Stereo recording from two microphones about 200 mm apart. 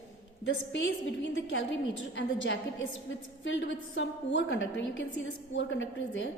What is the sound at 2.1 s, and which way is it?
A woman's voice, 65° left (ahead or behind).